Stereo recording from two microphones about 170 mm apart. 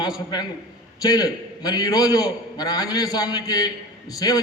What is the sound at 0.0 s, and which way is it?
A man's voice, 25° left (ahead or behind).